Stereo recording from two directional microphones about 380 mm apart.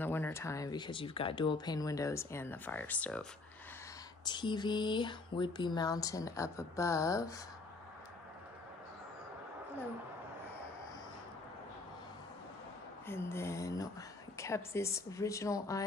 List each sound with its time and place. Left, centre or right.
0.0 s speech: centre
13.0 s speech: centre